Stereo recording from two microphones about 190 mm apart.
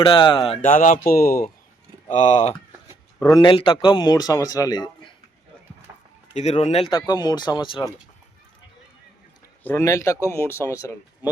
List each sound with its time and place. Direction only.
0.0 s speech: 25° left (ahead or behind)
0.6 s speech: 45° left (ahead or behind)
2.0 s speech: 35° left (ahead or behind)
3.2 s speech: 20° left (ahead or behind)
6.3 s speech: 35° left (ahead or behind)
9.6 s speech: 15° left (ahead or behind)